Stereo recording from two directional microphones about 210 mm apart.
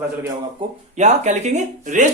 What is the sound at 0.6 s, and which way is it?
Speech, 25° right (ahead or behind).